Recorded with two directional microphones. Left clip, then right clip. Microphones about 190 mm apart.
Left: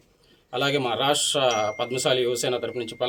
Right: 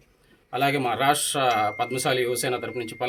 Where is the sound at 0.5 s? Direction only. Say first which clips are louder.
Even; 10° left (ahead or behind).